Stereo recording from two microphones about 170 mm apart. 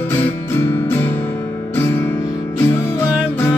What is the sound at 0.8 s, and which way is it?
Music, 10° left (ahead or behind).